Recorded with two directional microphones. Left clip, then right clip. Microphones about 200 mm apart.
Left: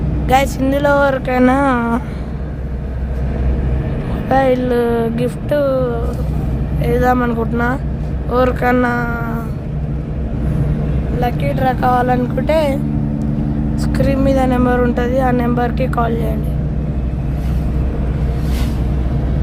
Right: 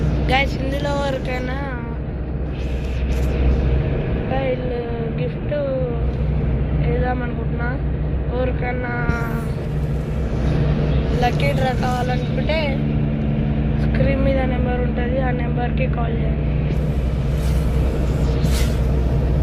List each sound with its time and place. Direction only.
0.3 s speech: 45° left (ahead or behind)
4.3 s speech: 50° left (ahead or behind)
6.8 s speech: 50° left (ahead or behind)
11.2 s speech: 35° left (ahead or behind)
13.9 s speech: 40° left (ahead or behind)